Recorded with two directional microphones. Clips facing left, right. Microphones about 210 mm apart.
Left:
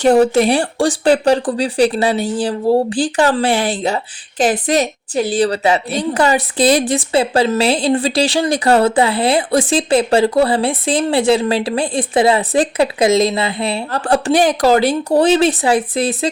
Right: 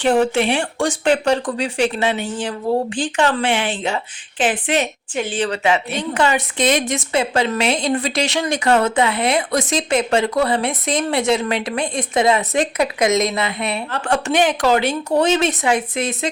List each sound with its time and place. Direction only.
0.0 s speech: 40° left (ahead or behind)